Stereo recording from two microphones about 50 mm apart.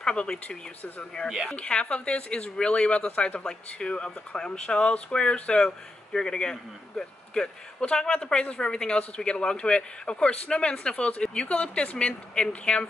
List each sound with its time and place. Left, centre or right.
0.0 s a man's voice: centre